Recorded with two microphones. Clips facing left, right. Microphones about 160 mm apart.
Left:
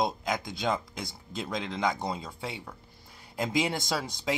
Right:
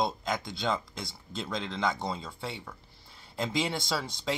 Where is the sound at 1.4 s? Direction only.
5° left (ahead or behind).